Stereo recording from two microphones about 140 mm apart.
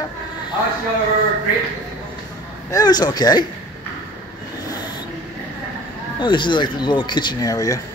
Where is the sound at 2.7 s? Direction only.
30° left (ahead or behind).